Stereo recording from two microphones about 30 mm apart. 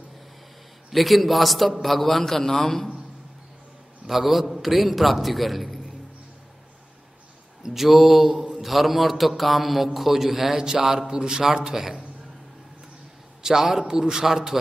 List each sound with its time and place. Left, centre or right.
0.8 s a man's voice: centre
4.1 s a man's voice: centre
7.6 s a man's voice: centre; by 11.8 s right
13.4 s a man's voice: centre